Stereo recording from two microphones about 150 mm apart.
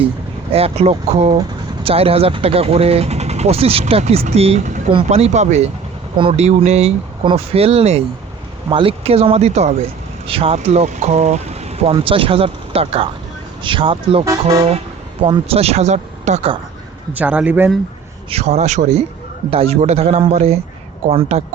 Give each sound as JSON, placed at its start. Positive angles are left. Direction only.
{"t": 0.5, "sound": "speech", "side_deg": -40}
{"t": 17.2, "sound": "speech", "side_deg": -10}
{"t": 18.3, "sound": "speech", "side_deg": -45}